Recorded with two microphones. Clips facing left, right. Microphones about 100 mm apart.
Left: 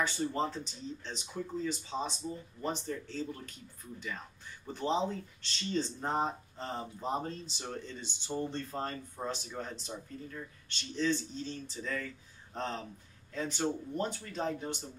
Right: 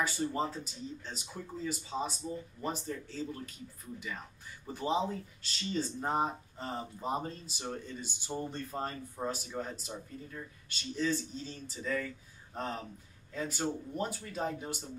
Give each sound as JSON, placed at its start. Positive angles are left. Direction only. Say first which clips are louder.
{"t": 0.0, "sound": "speech", "louder": "even", "side_deg": -5}
{"t": 4.7, "sound": "speech", "louder": "even", "side_deg": -10}